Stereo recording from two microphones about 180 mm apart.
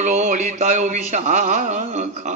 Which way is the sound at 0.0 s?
45° right (ahead or behind).